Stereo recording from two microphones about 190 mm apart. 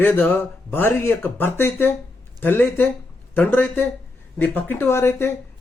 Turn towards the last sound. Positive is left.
turn(degrees=10)  # may be behind; listen again after turning